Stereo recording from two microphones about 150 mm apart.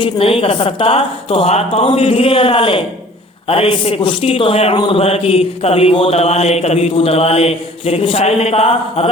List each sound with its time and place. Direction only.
0.0 s mantra: 40° left (ahead or behind)